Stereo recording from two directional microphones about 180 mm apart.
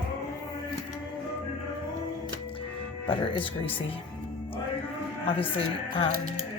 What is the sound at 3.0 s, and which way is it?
Speech, 30° left (ahead or behind).